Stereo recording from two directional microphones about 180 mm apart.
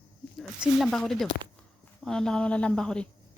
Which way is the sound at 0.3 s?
Centre (ahead or behind).